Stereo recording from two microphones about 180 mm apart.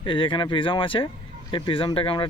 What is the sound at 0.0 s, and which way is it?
Speech, 30° left (ahead or behind).